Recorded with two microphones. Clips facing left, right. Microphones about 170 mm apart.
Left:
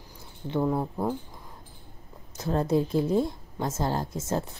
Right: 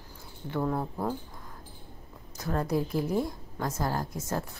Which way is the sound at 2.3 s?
25° left (ahead or behind).